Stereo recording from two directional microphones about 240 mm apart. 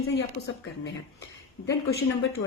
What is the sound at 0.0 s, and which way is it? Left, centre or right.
Speech, left.